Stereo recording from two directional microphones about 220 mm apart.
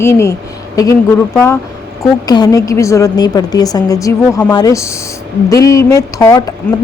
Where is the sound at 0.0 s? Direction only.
10° left (ahead or behind).